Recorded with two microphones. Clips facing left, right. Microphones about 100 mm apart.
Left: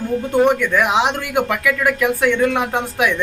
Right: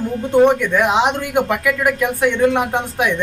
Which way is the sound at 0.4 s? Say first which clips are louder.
Right 2 dB; 20° right (ahead or behind).